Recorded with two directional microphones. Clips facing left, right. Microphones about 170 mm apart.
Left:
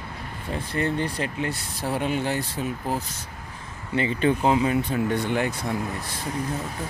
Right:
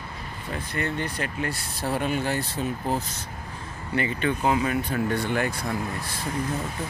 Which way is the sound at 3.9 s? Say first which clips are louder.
Left 3 dB; 25° left (ahead or behind).